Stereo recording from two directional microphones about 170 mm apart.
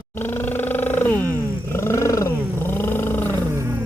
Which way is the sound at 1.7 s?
15° left (ahead or behind).